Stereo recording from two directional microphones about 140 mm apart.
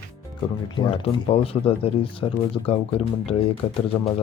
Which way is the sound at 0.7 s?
40° left (ahead or behind).